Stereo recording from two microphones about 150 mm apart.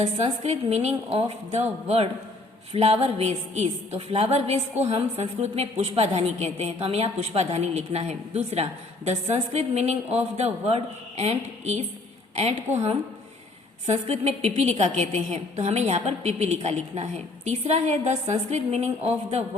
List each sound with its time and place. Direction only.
0.0 s a woman's voice: 45° right (ahead or behind)
13.8 s a woman's voice: 45° right (ahead or behind)